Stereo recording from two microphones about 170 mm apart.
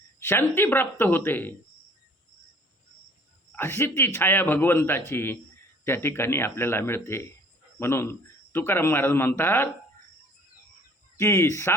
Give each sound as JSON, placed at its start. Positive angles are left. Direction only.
{"t": 0.2, "sound": "a man's voice", "side_deg": 15}
{"t": 3.5, "sound": "a man's voice", "side_deg": 15}
{"t": 11.2, "sound": "a man's voice", "side_deg": 15}